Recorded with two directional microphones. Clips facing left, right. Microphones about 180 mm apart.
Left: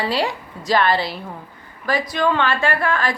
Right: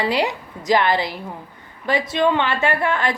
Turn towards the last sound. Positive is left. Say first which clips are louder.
# even
turn(degrees=-20)  # may be behind; listen again after turning